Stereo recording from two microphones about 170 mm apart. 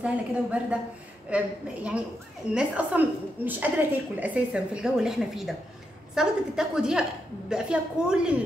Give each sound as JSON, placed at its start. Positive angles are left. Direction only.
{"t": 0.0, "sound": "a woman's voice", "side_deg": -5}